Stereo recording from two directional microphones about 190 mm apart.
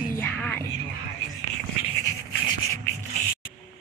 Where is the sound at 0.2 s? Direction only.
10° left (ahead or behind).